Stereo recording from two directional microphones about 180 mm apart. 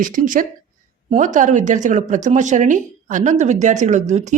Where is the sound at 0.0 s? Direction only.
50° right (ahead or behind).